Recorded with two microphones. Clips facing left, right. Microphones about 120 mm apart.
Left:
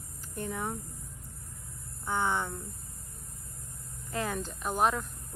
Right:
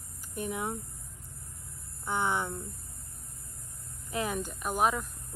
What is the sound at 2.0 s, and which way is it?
Speech, 15° right (ahead or behind).